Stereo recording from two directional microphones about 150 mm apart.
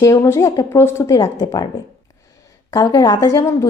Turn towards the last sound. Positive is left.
turn(degrees=25)  # may be behind; listen again after turning